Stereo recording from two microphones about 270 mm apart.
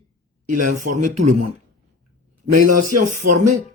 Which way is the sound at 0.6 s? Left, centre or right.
Right.